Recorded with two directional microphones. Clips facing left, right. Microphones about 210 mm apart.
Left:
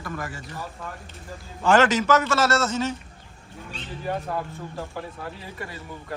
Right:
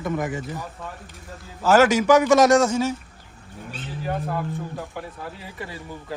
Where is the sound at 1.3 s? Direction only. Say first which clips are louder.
Right 2 dB; 5° right (ahead or behind).